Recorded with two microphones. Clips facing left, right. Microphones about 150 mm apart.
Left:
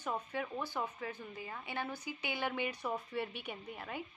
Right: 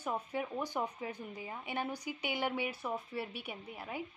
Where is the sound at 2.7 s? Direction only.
Centre (ahead or behind).